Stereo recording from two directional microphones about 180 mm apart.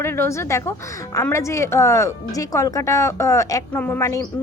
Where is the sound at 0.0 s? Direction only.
15° left (ahead or behind).